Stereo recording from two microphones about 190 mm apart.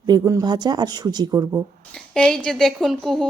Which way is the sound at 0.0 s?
20° right (ahead or behind).